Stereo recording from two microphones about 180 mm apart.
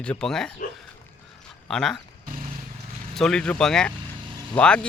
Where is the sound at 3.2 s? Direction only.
5° left (ahead or behind).